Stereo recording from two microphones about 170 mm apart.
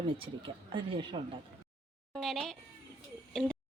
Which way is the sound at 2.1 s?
Centre (ahead or behind).